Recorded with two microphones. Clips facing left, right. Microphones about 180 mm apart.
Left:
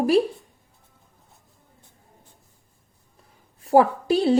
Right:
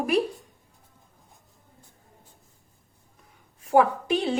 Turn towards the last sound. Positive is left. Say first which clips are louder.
# left 5 dB
turn(degrees=35)  # may be behind; listen again after turning